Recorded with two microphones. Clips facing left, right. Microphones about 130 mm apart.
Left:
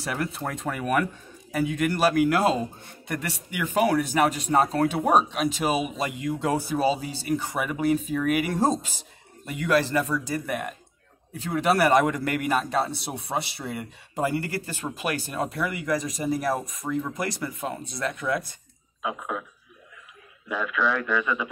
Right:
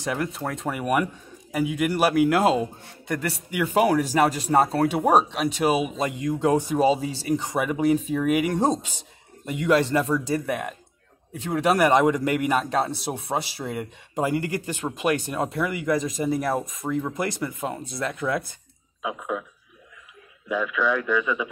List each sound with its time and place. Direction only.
0.3 s speech: centre (ahead or behind)
0.7 s speech: 15° right (ahead or behind)
3.7 s speech: 20° right (ahead or behind)
5.0 s speech: 5° right (ahead or behind)
5.9 s speech: 20° right (ahead or behind)
11.7 s speech: 20° right (ahead or behind)
12.8 s speech: centre (ahead or behind)
13.1 s speech: 25° right (ahead or behind)
19.0 s speech: 5° right (ahead or behind)
20.4 s speech: 5° right (ahead or behind)